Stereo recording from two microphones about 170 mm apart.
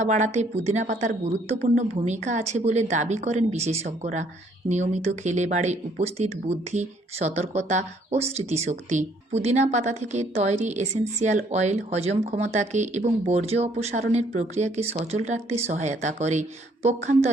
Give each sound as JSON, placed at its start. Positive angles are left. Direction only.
{"t": 0.0, "sound": "speech", "side_deg": -45}